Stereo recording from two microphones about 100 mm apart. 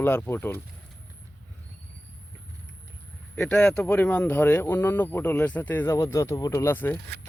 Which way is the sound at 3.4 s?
10° left (ahead or behind).